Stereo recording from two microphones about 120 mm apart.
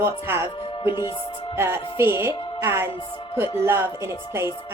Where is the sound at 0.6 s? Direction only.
45° left (ahead or behind).